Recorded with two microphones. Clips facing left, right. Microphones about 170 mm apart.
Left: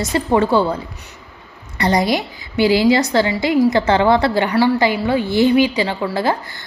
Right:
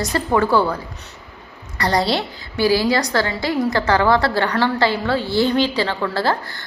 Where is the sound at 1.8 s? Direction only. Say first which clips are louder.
Left 2 dB; 20° left (ahead or behind).